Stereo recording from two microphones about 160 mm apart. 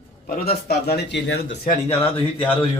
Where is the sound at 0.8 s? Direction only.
90° left.